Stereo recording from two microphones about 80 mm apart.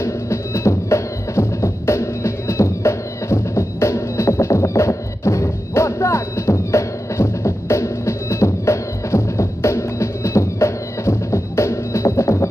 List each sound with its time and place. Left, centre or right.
0.0 s music: left